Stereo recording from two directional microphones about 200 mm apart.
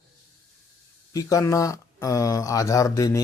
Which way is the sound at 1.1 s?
15° left (ahead or behind).